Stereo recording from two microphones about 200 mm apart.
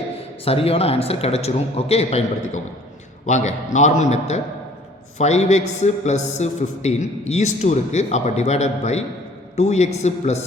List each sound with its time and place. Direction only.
0.2 s a man's voice: 30° left (ahead or behind)